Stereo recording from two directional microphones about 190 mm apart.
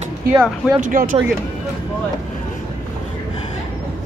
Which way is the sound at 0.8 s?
45° right (ahead or behind).